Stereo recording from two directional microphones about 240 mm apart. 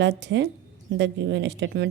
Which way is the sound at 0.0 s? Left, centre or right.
Right.